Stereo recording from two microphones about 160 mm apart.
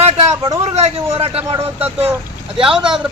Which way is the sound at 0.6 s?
40° right (ahead or behind).